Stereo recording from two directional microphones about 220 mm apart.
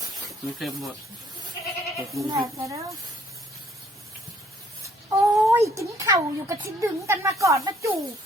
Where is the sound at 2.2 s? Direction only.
15° right (ahead or behind).